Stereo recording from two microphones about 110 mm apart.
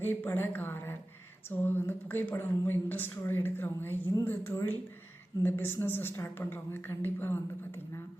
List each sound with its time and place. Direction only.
0.0 s a woman's voice: 20° left (ahead or behind)
1.5 s a sound: 15° left (ahead or behind)
2.3 s a woman's voice: 20° left (ahead or behind)